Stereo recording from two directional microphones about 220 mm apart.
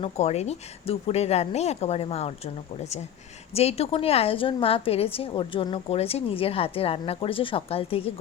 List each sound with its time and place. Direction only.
0.0 s a woman's voice: 30° left (ahead or behind)
3.5 s a woman's voice: 30° left (ahead or behind)